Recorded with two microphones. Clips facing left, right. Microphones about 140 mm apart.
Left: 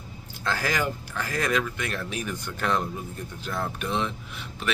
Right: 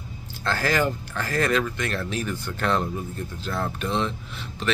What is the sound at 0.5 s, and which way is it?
Speech, 10° left (ahead or behind).